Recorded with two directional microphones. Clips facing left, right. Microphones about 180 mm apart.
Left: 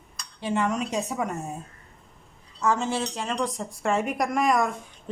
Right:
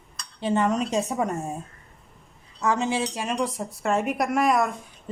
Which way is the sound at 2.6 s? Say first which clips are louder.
Right 1 dB; 15° right (ahead or behind).